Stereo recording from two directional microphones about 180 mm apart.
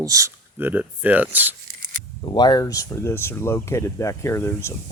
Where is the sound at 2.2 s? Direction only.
25° left (ahead or behind).